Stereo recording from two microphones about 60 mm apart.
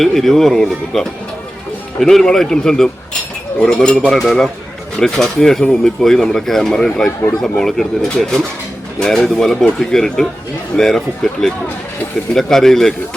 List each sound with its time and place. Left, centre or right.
0.0 s speech: centre